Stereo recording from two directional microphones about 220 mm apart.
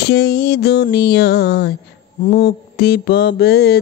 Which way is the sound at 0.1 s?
50° left (ahead or behind).